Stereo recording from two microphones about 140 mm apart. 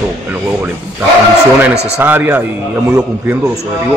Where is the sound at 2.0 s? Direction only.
15° right (ahead or behind).